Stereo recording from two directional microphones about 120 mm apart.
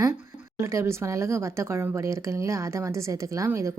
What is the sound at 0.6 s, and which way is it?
Speech, 25° right (ahead or behind).